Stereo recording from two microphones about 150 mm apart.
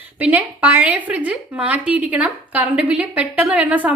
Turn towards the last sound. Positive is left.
turn(degrees=-10)  # may be behind; listen again after turning